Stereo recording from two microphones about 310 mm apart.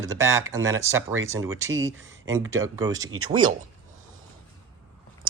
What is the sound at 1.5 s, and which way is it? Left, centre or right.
Speech, right.